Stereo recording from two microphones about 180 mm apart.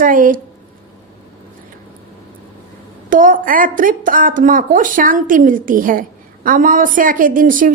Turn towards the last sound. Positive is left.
turn(degrees=-50)  # may be behind; listen again after turning